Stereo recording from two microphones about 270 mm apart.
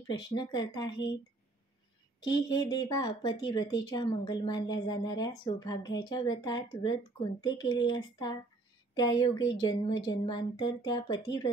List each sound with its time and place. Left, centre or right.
0.3 s speech: centre
2.2 s speech: left
2.6 s speech: centre